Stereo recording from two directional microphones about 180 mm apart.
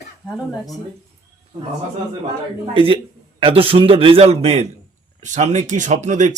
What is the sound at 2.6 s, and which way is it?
Speech, 30° right (ahead or behind).